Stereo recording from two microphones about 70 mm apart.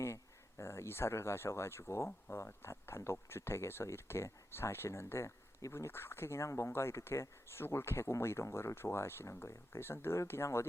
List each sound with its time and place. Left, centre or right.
0.6 s speech: left